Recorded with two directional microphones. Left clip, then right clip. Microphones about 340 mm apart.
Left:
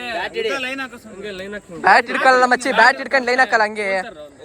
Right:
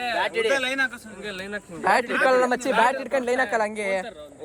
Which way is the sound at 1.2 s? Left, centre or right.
Centre.